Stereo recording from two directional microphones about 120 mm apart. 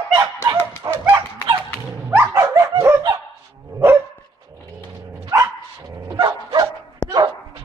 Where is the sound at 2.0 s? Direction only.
15° right (ahead or behind).